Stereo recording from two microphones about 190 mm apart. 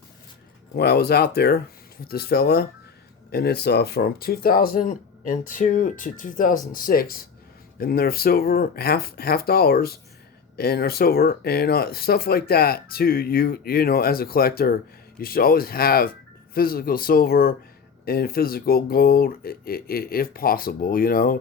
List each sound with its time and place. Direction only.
0.8 s speech: 55° left (ahead or behind)